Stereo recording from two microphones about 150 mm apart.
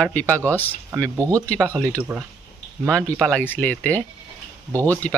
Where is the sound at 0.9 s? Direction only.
20° right (ahead or behind).